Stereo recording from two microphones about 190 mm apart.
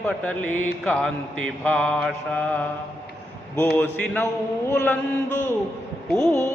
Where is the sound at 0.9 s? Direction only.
5° left (ahead or behind).